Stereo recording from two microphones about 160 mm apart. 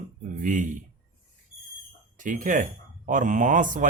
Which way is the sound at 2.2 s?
55° right (ahead or behind).